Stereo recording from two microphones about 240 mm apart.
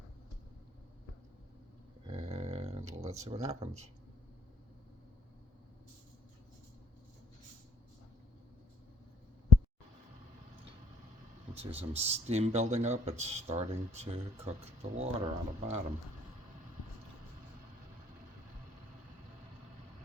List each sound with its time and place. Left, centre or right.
2.0 s a sound: right
3.2 s speech: right
11.5 s speech: right